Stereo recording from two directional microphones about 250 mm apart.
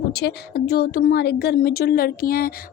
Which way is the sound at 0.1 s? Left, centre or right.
Left.